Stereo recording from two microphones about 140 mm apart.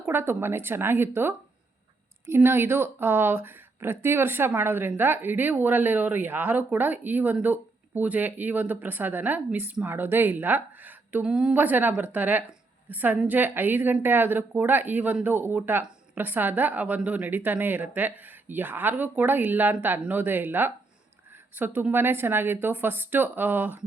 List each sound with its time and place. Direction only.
0.0 s speech: 15° right (ahead or behind)